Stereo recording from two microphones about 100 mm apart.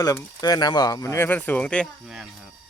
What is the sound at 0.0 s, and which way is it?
Speech, 40° left (ahead or behind).